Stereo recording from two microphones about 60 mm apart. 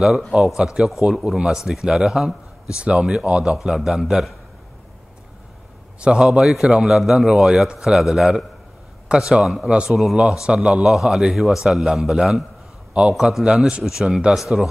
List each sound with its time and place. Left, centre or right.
0.0 s a man's voice: centre
0.6 s a man's voice: centre
0.8 s a man's voice: centre
5.9 s a man's voice: centre